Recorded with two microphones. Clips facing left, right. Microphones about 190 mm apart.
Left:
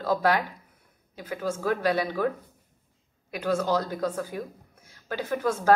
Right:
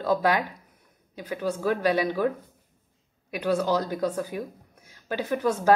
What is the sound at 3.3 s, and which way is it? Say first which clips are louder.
A woman's voice: right 1 dB; 15° right (ahead or behind).